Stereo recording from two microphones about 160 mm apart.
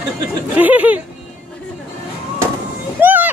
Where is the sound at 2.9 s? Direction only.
10° right (ahead or behind).